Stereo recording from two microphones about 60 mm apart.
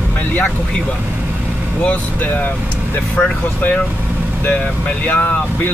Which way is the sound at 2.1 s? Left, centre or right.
Left.